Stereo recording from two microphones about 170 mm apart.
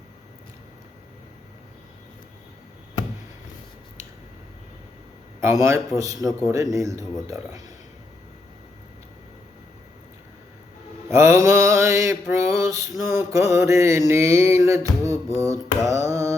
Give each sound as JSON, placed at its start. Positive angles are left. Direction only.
{"t": 5.4, "sound": "mantra", "side_deg": -15}
{"t": 6.5, "sound": "speech", "side_deg": -20}
{"t": 11.1, "sound": "mantra", "side_deg": -15}